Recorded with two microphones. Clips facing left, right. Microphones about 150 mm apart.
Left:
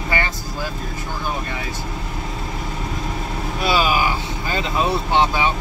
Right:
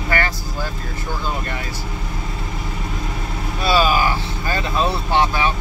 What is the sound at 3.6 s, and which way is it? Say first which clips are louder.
Vehicle: right 2 dB; 15° left (ahead or behind).